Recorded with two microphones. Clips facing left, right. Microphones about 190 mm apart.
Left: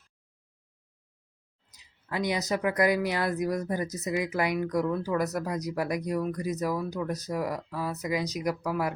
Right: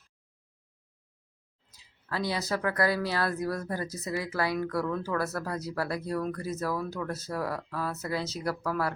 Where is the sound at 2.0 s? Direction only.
15° left (ahead or behind).